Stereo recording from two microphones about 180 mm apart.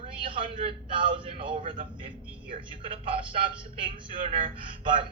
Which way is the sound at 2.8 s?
30° right (ahead or behind).